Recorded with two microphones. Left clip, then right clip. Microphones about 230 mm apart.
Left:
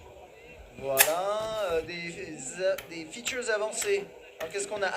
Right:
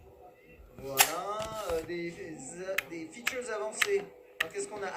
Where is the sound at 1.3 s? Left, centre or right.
Left.